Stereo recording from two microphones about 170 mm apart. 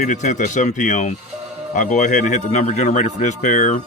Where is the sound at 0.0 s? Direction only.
45° left (ahead or behind).